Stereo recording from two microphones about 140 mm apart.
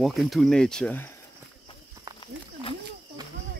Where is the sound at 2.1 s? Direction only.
30° right (ahead or behind).